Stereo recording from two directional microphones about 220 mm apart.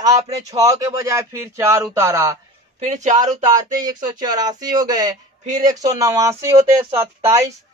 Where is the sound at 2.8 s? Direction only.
35° right (ahead or behind).